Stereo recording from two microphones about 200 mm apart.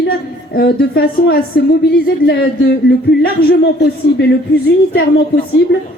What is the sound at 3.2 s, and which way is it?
A woman's voice, 55° left (ahead or behind).